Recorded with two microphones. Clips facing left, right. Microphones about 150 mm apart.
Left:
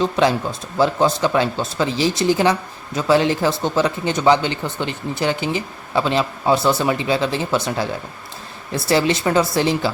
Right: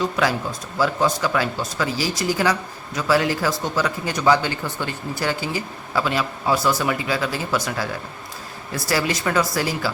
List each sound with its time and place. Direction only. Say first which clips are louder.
0.0 s speech: left 4 dB; 25° left (ahead or behind)